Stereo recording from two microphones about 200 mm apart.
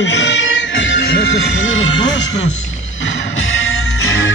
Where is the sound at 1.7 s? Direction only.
70° left (ahead or behind).